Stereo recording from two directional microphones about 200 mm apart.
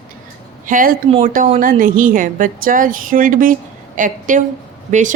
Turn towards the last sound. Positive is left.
turn(degrees=-40)  # may be behind; listen again after turning